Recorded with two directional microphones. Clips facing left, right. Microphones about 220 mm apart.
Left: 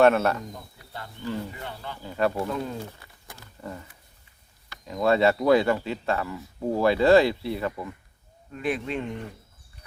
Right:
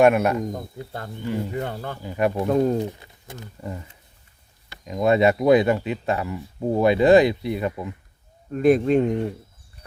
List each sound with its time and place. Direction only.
0.0 s speech: 15° right (ahead or behind)
0.8 s speech: 50° right (ahead or behind)
1.2 s speech: 15° right (ahead or behind)
1.5 s speech: 45° right (ahead or behind)
2.0 s speech: 15° right (ahead or behind)
2.5 s speech: 45° right (ahead or behind)
2.7 s speech: 20° right (ahead or behind)
8.5 s speech: 45° right (ahead or behind)